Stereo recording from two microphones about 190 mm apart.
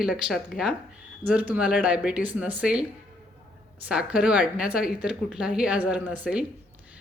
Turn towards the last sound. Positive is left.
turn(degrees=-5)  # may be behind; listen again after turning